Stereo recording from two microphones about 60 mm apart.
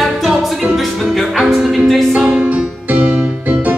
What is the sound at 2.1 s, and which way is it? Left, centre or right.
Music, centre.